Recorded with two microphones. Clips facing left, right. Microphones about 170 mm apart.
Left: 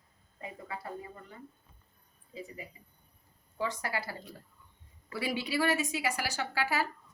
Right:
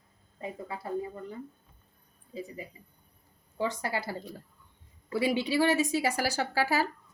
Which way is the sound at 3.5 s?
25° right (ahead or behind).